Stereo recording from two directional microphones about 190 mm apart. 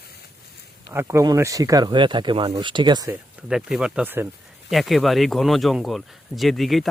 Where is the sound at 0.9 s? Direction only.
15° right (ahead or behind).